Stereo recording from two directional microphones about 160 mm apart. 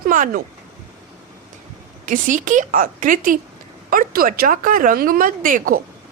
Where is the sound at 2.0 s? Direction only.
55° right (ahead or behind).